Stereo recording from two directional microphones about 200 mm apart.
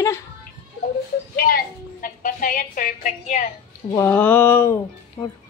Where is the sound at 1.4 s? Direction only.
50° left (ahead or behind).